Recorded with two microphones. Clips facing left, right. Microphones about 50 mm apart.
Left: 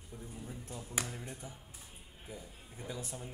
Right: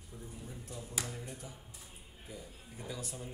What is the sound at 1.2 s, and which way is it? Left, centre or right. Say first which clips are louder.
Speech: even; left.